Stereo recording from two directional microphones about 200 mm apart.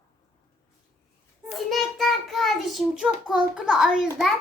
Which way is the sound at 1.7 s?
Centre (ahead or behind).